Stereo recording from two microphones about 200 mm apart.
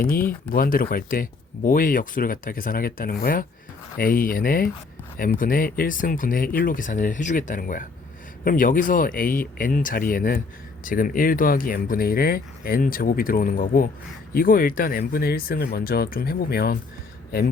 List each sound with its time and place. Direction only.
0.5 s speech: 45° left (ahead or behind)